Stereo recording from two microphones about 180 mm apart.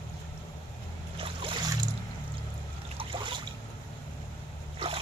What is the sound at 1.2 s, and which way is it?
Boat, 30° right (ahead or behind).